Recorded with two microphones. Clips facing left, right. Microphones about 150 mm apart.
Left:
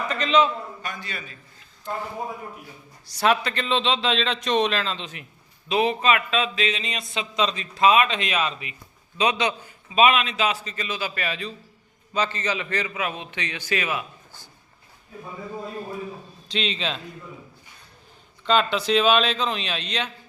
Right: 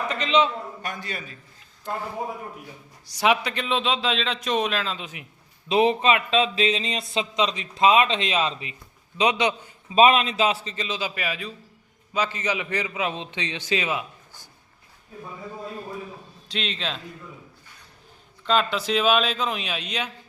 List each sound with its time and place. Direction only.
0.1 s a man's voice: 20° right (ahead or behind)
0.8 s a man's voice: 50° right (ahead or behind)
3.1 s a man's voice: 15° right (ahead or behind)
5.6 s a man's voice: 30° right (ahead or behind)
9.1 s a man's voice: 20° right (ahead or behind)
9.9 s a man's voice: 35° right (ahead or behind)
16.5 s speech: centre (ahead or behind)
18.4 s speech: centre (ahead or behind)